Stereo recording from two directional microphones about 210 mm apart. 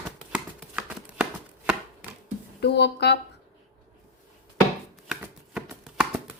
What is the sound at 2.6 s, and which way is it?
Speech, 55° left (ahead or behind).